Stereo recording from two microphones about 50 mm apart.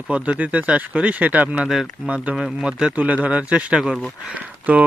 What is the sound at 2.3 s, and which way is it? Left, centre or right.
Speech, centre.